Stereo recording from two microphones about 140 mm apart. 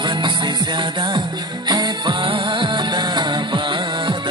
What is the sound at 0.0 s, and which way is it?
Music, 35° right (ahead or behind).